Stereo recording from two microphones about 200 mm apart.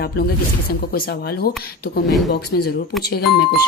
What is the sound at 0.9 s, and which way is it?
Speech, 50° left (ahead or behind).